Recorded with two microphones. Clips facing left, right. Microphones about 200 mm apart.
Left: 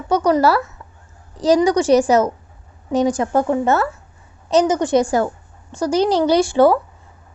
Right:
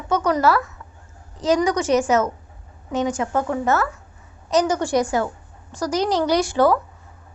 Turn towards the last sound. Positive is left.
turn(degrees=25)  # may be behind; listen again after turning